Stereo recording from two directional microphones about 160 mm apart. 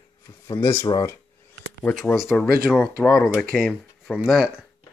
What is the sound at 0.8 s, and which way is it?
Speech, 25° left (ahead or behind).